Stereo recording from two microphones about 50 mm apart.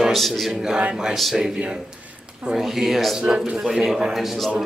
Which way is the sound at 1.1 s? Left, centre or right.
Centre.